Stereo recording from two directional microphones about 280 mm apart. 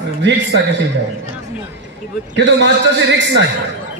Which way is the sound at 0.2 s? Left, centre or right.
Right.